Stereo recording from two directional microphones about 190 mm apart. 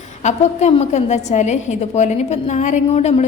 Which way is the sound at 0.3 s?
35° left (ahead or behind).